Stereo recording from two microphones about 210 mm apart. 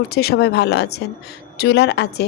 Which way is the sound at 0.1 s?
50° left (ahead or behind).